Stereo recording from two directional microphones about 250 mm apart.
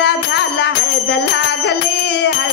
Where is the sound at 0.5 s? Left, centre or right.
Left.